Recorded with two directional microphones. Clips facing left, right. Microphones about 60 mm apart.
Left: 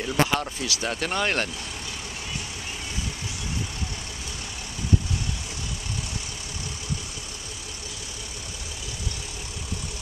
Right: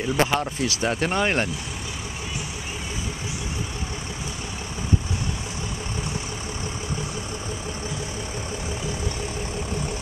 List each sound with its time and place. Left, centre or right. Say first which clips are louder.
0.0 s speech: right 2 dB; centre
0.4 s speech: right 4 dB; right